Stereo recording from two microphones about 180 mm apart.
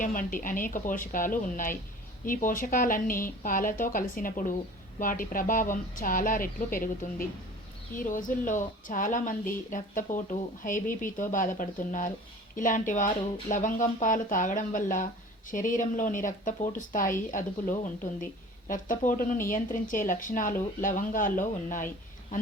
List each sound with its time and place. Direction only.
0.0 s speech: 50° left (ahead or behind)